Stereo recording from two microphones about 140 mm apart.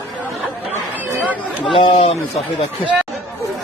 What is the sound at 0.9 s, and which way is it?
Chatter, 15° right (ahead or behind).